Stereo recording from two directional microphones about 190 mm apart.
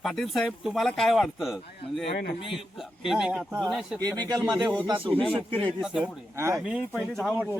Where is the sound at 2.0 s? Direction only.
30° left (ahead or behind).